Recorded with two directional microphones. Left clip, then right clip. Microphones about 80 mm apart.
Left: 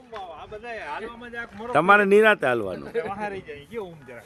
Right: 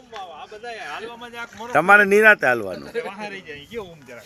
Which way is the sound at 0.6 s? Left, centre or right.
Left.